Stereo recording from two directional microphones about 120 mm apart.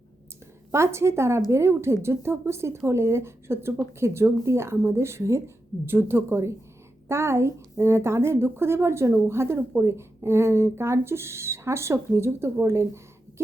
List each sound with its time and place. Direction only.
0.7 s a woman's voice: 20° right (ahead or behind)